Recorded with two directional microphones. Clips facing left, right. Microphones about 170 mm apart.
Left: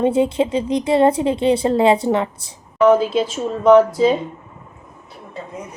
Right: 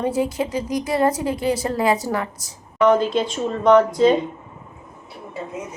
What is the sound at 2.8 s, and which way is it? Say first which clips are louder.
A woman's voice: left 3 dB; 5° left (ahead or behind).